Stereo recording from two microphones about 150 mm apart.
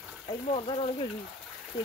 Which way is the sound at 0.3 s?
40° left (ahead or behind).